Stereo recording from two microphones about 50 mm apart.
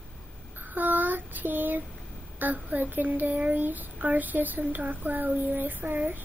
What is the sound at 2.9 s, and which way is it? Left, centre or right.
Speech, right.